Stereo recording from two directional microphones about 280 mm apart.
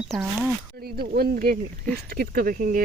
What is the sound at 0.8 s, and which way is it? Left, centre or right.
Speech, right.